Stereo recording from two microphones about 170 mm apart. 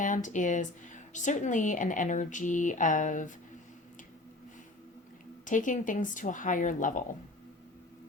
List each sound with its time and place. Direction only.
0.0 s speech: 50° left (ahead or behind)
5.5 s speech: 50° left (ahead or behind)